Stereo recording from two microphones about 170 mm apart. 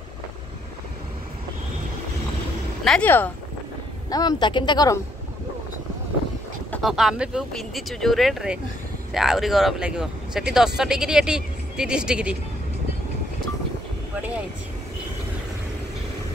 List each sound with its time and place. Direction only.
2.8 s speech: 5° left (ahead or behind)
4.1 s speech: 25° left (ahead or behind)
6.7 s speech: centre (ahead or behind)